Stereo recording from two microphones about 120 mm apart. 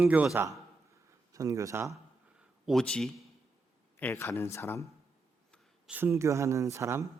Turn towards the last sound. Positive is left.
turn(degrees=-25)  # may be behind; listen again after turning